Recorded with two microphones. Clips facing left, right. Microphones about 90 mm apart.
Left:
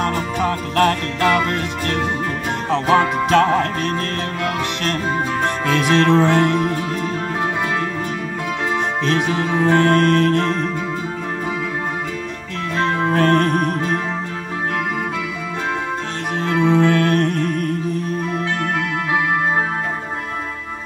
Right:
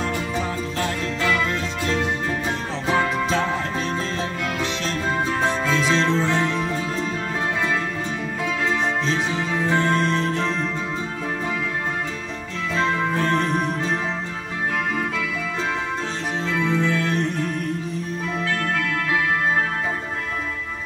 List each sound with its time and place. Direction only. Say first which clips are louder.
0.0 s music: left 5 dB; 60° left (ahead or behind)
5.4 s music: left 3 dB; 60° left (ahead or behind)
9.0 s music: left 5 dB; 60° left (ahead or behind)
12.7 s music: left 4 dB; 55° left (ahead or behind)
16.5 s music: left 8 dB; 20° left (ahead or behind)
16.8 s music: left 6 dB; 60° left (ahead or behind)